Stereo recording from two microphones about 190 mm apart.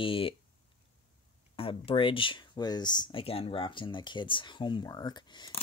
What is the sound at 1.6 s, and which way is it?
Speech, 30° left (ahead or behind).